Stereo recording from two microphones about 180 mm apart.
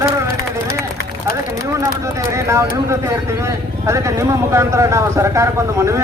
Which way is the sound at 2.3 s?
15° right (ahead or behind).